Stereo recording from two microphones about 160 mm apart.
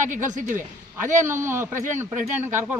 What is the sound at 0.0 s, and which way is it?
Speech, 55° right (ahead or behind).